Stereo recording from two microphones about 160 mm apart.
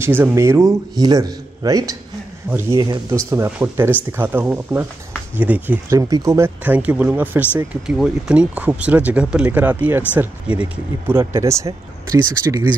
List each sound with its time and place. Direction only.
0.0 s speech: 15° right (ahead or behind)
3.3 s speech: 10° right (ahead or behind)
5.9 s speech: 20° right (ahead or behind)